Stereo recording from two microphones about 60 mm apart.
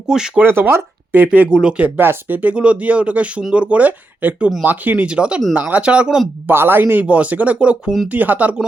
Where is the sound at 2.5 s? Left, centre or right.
Right.